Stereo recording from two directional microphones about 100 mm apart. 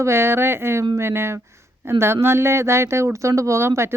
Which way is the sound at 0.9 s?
25° right (ahead or behind).